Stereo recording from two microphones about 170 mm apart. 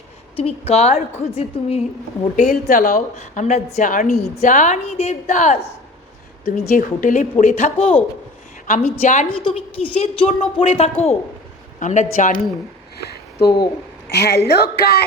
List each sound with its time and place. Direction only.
0.3 s a woman's voice: 35° left (ahead or behind)
2.3 s a woman's voice: 45° left (ahead or behind)
8.6 s a woman's voice: 55° left (ahead or behind)
9.7 s a woman's voice: 35° left (ahead or behind); by 12.4 s 50° left (ahead or behind)
13.0 s a sound: 70° left (ahead or behind)
14.1 s a woman's voice: 75° left (ahead or behind)